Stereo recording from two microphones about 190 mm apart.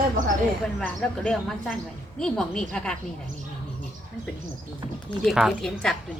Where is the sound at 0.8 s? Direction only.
5° left (ahead or behind).